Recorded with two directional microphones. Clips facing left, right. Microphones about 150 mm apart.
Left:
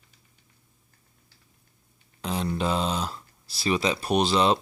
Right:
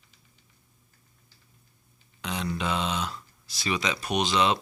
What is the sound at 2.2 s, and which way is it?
Speech, 35° left (ahead or behind).